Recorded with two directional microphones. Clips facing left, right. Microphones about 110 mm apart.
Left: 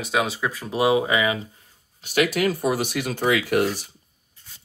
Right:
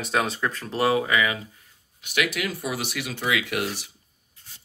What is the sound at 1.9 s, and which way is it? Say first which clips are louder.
Speech: left 5 dB; 35° left (ahead or behind).